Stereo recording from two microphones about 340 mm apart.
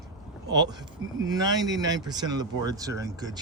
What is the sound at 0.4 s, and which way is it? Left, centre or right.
Speech, right.